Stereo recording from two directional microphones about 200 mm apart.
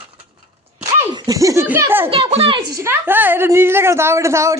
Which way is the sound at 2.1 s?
30° right (ahead or behind).